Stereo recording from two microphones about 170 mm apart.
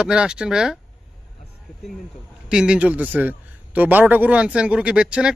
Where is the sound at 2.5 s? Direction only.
5° right (ahead or behind).